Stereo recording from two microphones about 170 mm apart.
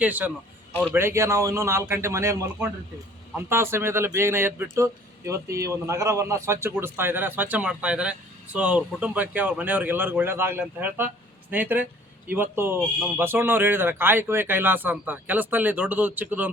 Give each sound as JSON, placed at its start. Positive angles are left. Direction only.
{"t": 0.0, "sound": "speech", "side_deg": -10}